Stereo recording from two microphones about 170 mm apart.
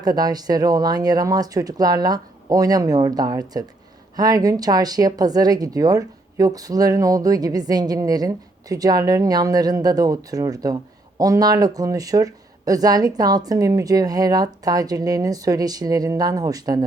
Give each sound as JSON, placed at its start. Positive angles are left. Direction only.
{"t": 0.0, "sound": "speech", "side_deg": -25}